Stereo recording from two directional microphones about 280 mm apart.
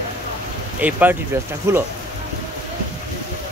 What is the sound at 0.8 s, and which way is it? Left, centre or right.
Speech, centre.